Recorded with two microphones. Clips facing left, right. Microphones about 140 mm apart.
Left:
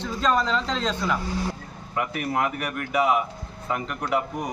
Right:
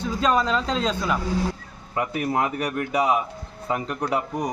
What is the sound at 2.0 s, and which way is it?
Speech, 30° right (ahead or behind).